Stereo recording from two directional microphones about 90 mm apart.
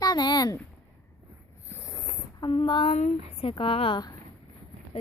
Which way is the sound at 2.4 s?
60° left (ahead or behind).